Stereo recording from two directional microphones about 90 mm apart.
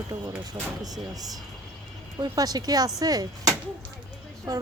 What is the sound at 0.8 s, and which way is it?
A woman's voice, 45° right (ahead or behind).